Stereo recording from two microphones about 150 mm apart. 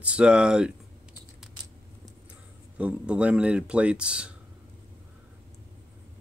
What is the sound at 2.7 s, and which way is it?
Speech, 10° right (ahead or behind).